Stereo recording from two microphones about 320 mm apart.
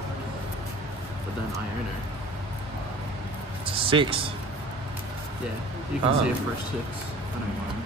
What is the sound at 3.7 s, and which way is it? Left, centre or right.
Speech, centre.